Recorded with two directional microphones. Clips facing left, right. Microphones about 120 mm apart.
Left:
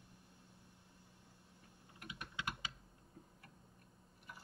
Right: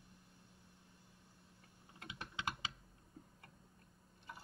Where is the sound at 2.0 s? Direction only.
25° right (ahead or behind).